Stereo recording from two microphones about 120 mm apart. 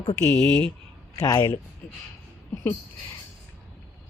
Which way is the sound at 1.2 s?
35° left (ahead or behind).